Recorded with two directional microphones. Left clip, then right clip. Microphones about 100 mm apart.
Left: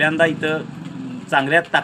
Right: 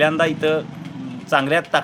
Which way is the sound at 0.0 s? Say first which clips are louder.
Even; 45° right (ahead or behind).